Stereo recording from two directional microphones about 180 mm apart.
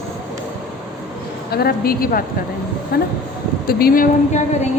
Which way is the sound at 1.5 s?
60° left (ahead or behind).